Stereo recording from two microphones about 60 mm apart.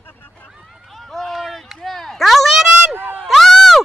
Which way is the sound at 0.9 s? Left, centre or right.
Centre.